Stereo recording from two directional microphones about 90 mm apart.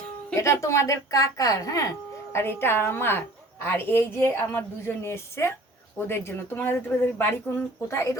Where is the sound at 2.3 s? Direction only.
25° left (ahead or behind).